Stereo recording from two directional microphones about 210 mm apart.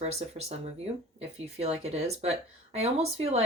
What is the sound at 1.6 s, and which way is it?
Speech, 30° right (ahead or behind).